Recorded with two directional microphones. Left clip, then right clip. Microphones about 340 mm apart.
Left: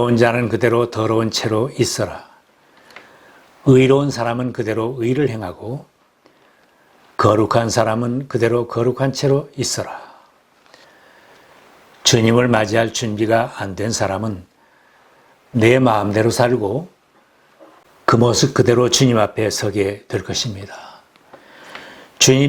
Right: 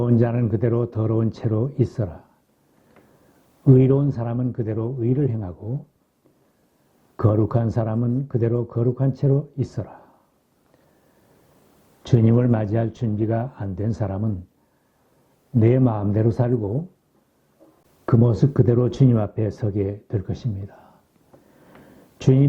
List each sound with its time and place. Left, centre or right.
0.0 s speech: centre
3.0 s a sound: centre
4.0 s speech: centre
7.2 s speech: centre
12.0 s speech: centre
15.5 s speech: centre
16.6 s speech: left
18.3 s speech: centre